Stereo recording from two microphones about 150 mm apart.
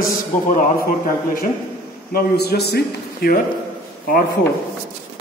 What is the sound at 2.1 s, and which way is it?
A man's voice, 90° left.